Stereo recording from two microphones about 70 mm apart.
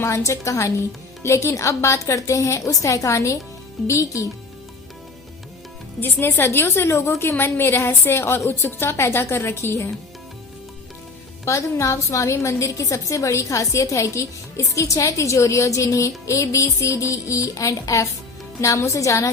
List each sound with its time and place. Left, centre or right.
0.0 s a woman's voice: left
6.0 s a woman's voice: left
11.4 s a woman's voice: left